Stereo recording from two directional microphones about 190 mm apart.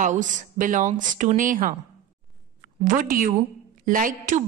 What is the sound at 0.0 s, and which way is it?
A woman's voice, 40° right (ahead or behind).